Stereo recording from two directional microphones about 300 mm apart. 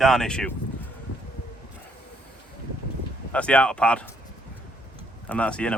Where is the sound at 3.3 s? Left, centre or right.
Centre.